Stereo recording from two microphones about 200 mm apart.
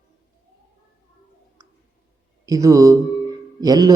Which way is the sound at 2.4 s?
15° right (ahead or behind).